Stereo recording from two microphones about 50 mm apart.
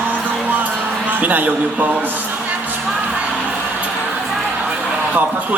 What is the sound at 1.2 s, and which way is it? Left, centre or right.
Speech, right.